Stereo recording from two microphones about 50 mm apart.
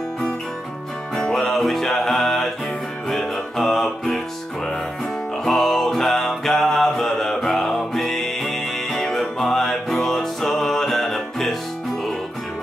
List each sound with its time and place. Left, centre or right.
1.1 s music: centre
5.4 s music: centre